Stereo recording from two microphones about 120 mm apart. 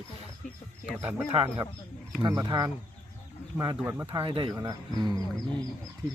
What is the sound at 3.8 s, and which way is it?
Speech, 15° right (ahead or behind).